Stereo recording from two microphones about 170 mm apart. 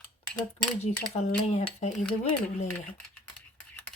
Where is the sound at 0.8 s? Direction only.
40° left (ahead or behind).